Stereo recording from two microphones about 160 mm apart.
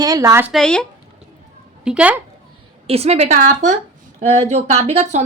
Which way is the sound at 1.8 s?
5° right (ahead or behind).